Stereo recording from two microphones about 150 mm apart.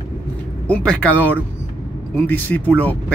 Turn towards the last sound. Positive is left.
turn(degrees=10)  # may be behind; listen again after turning